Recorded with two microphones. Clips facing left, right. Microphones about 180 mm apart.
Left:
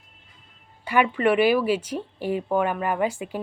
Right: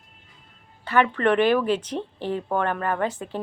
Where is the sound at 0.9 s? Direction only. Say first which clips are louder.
Even; 10° left (ahead or behind).